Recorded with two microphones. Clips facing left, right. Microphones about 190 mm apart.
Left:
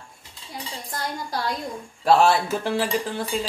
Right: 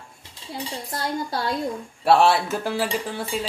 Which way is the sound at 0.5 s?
25° right (ahead or behind).